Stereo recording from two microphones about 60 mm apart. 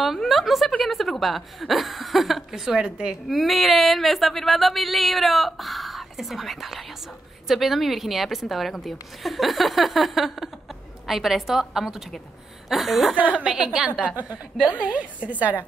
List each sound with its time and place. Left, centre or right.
0.0 s a woman's voice: centre
3.3 s speech: centre
13.4 s a woman's voice: centre